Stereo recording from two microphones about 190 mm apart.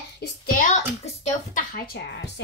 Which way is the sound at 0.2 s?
45° left (ahead or behind).